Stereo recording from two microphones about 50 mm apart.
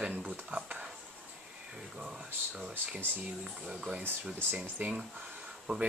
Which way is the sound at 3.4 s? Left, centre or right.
Right.